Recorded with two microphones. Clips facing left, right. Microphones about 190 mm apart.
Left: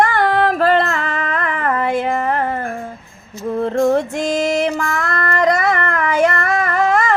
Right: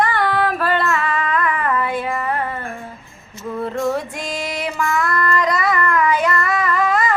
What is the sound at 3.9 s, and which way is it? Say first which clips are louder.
Female singing: left 7 dB; 45° left (ahead or behind).